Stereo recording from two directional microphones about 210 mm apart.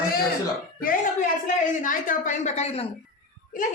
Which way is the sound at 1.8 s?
40° left (ahead or behind).